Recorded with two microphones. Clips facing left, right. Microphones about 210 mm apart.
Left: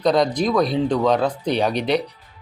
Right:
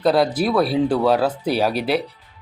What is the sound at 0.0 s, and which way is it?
A man's voice, 5° right (ahead or behind).